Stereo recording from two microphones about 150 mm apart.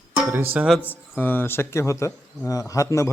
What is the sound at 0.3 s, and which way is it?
Speech, 15° right (ahead or behind).